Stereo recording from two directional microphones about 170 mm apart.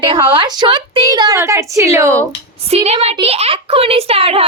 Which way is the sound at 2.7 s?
35° right (ahead or behind).